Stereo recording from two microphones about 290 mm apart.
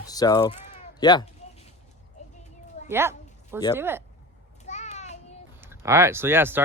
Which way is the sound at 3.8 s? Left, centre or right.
Centre.